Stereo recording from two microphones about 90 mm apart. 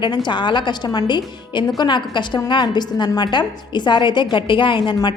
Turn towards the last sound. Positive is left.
turn(degrees=65)  # may be behind; listen again after turning